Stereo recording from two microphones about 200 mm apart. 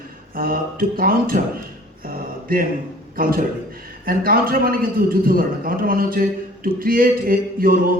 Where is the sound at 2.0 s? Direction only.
45° right (ahead or behind).